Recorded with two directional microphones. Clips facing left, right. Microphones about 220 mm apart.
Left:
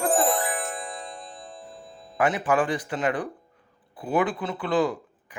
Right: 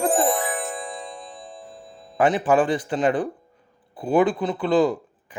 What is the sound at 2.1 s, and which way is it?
Speech, 30° right (ahead or behind).